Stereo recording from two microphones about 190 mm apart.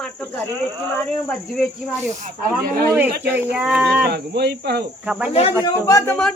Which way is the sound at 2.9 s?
10° right (ahead or behind).